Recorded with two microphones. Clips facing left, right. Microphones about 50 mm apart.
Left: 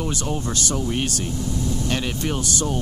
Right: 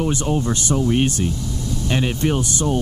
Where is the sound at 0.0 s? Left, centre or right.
Right.